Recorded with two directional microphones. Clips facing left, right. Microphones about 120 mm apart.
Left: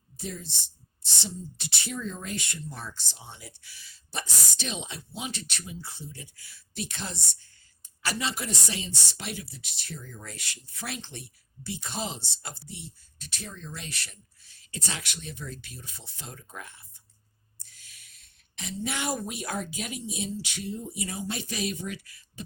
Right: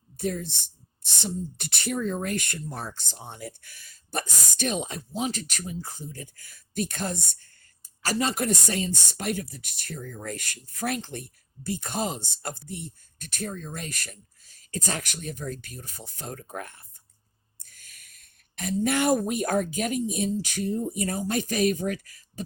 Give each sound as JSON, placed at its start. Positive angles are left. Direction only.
{"t": 0.2, "sound": "speech", "side_deg": -55}